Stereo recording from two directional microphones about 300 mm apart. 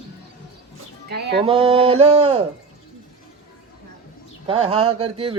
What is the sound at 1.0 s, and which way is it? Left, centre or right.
Speech, right.